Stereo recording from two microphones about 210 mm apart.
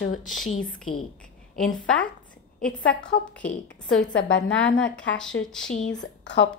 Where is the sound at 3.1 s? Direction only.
50° left (ahead or behind).